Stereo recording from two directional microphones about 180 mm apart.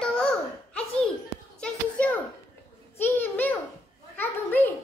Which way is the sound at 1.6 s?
5° left (ahead or behind).